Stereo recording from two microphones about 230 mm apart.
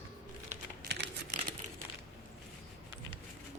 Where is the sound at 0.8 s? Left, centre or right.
Right.